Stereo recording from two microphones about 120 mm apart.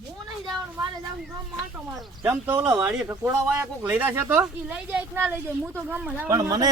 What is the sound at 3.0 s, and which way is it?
Speech, 20° right (ahead or behind).